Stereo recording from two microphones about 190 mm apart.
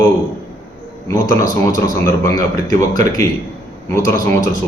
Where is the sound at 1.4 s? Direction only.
15° left (ahead or behind).